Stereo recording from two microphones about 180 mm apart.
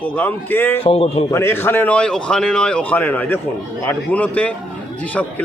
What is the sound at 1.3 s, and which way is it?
A man's voice, 15° left (ahead or behind).